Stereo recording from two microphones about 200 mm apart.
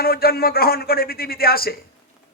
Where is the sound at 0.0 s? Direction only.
50° left (ahead or behind).